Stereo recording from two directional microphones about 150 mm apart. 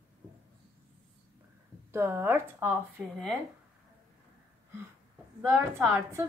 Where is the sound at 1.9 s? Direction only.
15° right (ahead or behind).